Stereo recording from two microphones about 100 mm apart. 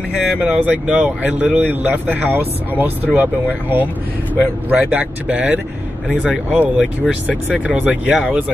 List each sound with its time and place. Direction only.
0.4 s speech: 10° right (ahead or behind)